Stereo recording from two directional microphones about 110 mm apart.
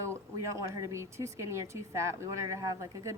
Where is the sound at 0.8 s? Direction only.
25° right (ahead or behind).